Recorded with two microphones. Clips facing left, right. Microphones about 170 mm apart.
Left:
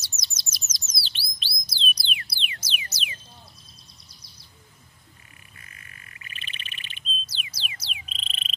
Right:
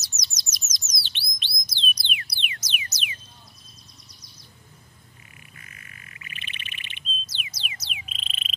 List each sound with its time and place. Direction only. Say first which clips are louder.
0.4 s bird: right 1 dB; 30° left (ahead or behind)
1.7 s music: even; 30° left (ahead or behind)
5.7 s bird: right 2 dB; 35° left (ahead or behind)